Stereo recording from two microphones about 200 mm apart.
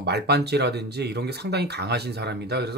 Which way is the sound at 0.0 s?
55° right (ahead or behind).